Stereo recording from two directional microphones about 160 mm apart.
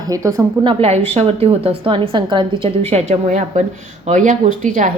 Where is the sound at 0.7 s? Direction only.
40° right (ahead or behind).